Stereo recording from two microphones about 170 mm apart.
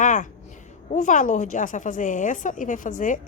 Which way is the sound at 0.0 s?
50° left (ahead or behind).